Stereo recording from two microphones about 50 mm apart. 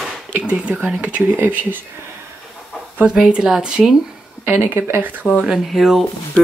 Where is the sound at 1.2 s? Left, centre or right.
Right.